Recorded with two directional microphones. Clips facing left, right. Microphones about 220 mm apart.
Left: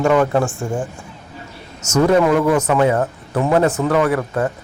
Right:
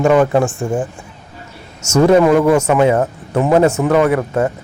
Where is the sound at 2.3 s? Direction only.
25° right (ahead or behind).